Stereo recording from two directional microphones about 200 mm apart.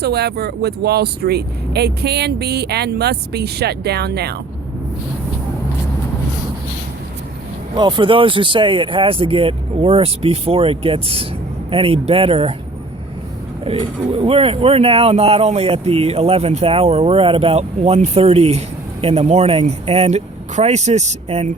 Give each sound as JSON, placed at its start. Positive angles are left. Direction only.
{"t": 0.0, "sound": "speech", "side_deg": -55}
{"t": 7.8, "sound": "speech", "side_deg": -25}
{"t": 13.7, "sound": "speech", "side_deg": -30}